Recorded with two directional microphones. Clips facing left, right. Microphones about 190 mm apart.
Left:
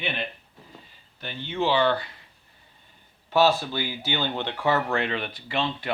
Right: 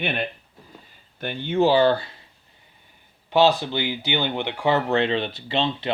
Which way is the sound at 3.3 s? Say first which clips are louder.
Right 3 dB; 15° right (ahead or behind).